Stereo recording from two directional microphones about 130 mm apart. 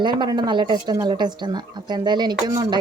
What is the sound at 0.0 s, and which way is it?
A woman's voice, 35° right (ahead or behind).